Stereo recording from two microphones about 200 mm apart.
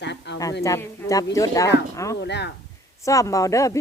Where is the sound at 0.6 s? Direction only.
15° left (ahead or behind).